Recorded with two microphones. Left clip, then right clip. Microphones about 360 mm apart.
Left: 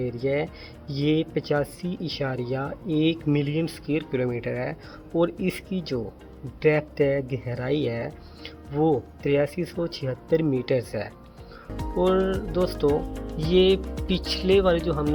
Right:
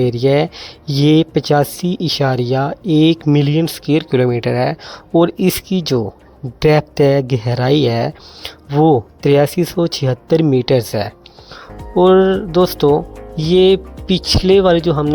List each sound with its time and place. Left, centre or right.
0.0 s speech: right